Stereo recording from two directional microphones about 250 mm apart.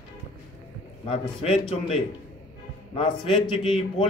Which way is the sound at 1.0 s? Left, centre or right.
Left.